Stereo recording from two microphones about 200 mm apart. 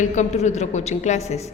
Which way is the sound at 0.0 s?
35° left (ahead or behind).